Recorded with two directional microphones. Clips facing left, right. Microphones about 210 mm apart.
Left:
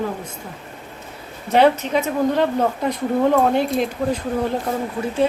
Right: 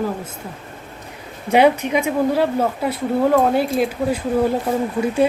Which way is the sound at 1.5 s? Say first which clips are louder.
Right 1 dB; 10° right (ahead or behind).